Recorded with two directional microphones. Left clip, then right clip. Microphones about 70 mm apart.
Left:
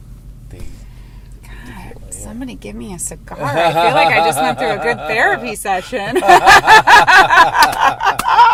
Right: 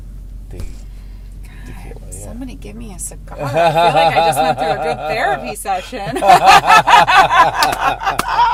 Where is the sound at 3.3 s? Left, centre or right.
Centre.